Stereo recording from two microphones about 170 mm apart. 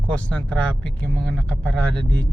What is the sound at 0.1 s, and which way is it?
Speech, 10° left (ahead or behind).